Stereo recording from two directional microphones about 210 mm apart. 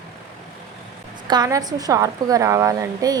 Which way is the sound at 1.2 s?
20° right (ahead or behind).